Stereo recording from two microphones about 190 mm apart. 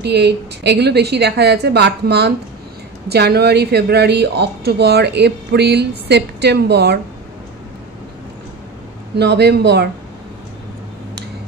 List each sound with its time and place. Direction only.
0.0 s speech: 60° right (ahead or behind)
9.1 s speech: 60° right (ahead or behind)